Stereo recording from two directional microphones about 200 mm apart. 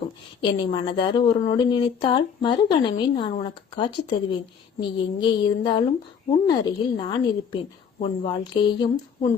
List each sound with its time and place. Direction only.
0.4 s a woman's voice: 25° left (ahead or behind)